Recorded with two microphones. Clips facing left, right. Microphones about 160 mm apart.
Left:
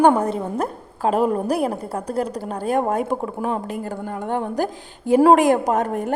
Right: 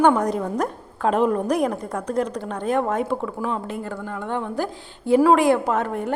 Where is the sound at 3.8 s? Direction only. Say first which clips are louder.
Left 2 dB; 45° left (ahead or behind).